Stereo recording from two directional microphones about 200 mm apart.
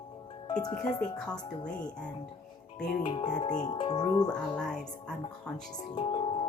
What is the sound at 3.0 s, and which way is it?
Speech, 25° left (ahead or behind).